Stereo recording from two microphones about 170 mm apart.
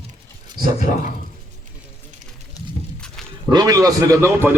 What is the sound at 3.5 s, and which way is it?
A man's voice, 20° right (ahead or behind).